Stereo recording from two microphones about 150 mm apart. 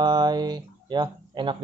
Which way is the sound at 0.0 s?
25° right (ahead or behind).